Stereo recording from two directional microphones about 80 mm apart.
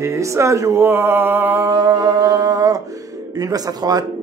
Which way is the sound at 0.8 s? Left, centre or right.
Right.